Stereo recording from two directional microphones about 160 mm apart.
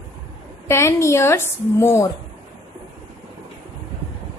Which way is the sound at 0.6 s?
15° left (ahead or behind).